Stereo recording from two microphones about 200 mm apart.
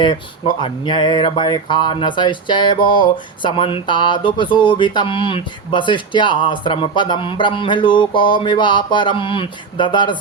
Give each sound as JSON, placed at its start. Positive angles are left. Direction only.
{"t": 0.0, "sound": "speech", "side_deg": 25}